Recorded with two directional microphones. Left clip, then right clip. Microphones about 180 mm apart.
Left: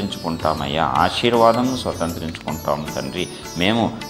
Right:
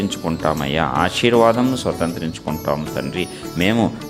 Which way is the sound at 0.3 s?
35° right (ahead or behind).